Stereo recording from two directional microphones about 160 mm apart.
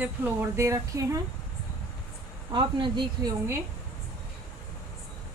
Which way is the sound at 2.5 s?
30° right (ahead or behind).